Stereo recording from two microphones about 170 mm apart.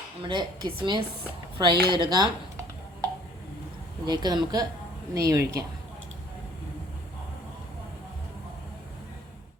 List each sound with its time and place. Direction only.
0.2 s a woman's voice: 30° right (ahead or behind)
4.0 s a woman's voice: 25° right (ahead or behind)